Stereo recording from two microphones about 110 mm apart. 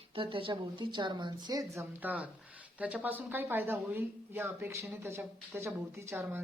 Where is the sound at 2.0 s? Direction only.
15° right (ahead or behind).